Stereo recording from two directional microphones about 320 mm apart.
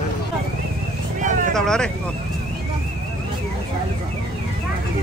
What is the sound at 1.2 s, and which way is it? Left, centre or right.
Vehicle, right.